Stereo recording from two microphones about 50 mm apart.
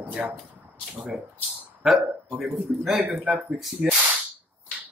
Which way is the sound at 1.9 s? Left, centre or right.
Centre.